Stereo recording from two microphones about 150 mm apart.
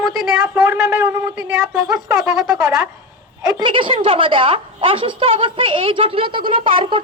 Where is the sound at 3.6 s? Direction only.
35° right (ahead or behind).